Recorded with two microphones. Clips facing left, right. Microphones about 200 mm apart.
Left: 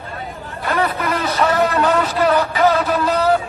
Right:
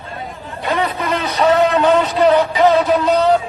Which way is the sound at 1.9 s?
Centre (ahead or behind).